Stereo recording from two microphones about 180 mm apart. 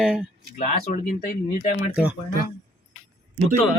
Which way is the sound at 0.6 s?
40° left (ahead or behind).